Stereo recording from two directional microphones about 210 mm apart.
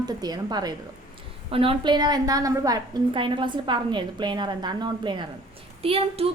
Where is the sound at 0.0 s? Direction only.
20° right (ahead or behind).